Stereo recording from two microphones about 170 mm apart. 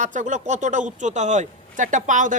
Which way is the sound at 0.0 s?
45° right (ahead or behind).